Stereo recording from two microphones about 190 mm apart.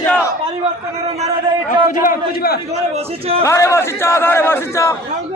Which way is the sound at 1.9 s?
50° left (ahead or behind).